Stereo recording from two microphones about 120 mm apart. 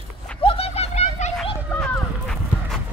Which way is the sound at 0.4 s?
50° left (ahead or behind).